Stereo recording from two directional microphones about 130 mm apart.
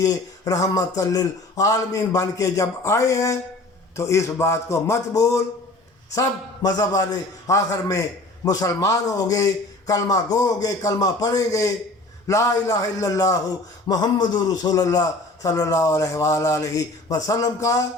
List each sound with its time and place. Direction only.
0.0 s a man's voice: 30° left (ahead or behind)